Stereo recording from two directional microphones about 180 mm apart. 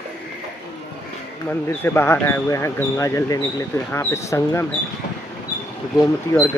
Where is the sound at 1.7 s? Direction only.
15° left (ahead or behind).